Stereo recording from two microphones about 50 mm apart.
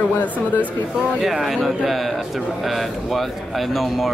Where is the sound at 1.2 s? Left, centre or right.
Centre.